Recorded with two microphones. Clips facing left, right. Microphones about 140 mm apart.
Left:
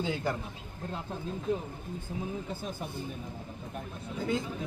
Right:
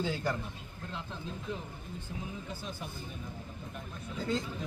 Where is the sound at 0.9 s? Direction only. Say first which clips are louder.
Left 5 dB; 45° left (ahead or behind).